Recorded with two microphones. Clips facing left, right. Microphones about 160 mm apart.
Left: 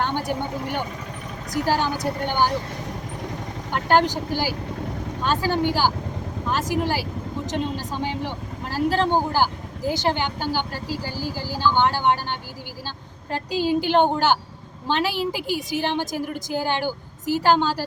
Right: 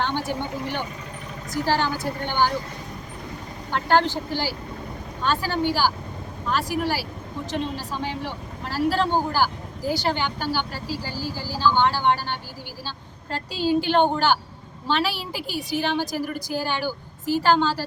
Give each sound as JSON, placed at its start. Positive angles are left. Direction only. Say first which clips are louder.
{"t": 0.0, "sound": "a woman's voice", "louder": "left 1 dB", "side_deg": 15}
{"t": 3.7, "sound": "a woman's voice", "louder": "left 1 dB", "side_deg": 15}